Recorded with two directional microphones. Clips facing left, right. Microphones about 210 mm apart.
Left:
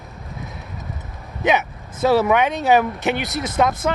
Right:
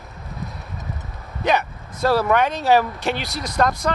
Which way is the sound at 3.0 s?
20° left (ahead or behind).